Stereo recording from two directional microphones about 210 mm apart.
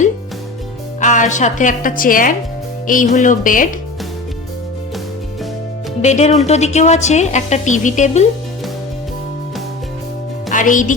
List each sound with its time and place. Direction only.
1.0 s a woman's voice: 35° left (ahead or behind)
6.0 s a woman's voice: 35° left (ahead or behind)
10.5 s a woman's voice: 40° left (ahead or behind)